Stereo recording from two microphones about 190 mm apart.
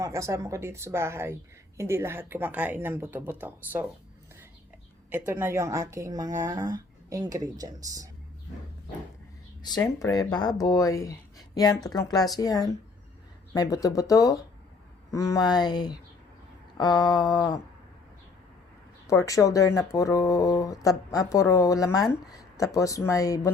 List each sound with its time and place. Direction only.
0.0 s speech: 15° right (ahead or behind)
5.1 s speech: 10° right (ahead or behind)
9.6 s speech: 20° left (ahead or behind)
19.0 s speech: 15° left (ahead or behind)